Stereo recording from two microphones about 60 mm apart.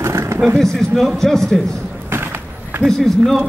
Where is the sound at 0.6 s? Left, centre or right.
Centre.